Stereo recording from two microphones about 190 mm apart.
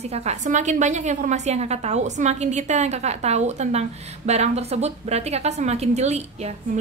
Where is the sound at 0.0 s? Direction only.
35° right (ahead or behind).